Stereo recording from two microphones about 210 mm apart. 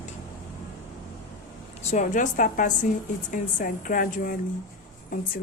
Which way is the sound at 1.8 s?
35° left (ahead or behind).